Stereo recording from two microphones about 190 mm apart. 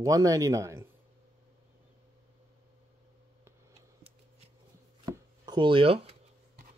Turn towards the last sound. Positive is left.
turn(degrees=-30)  # may be behind; listen again after turning